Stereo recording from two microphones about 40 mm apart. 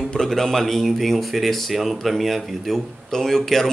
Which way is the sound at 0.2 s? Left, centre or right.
Centre.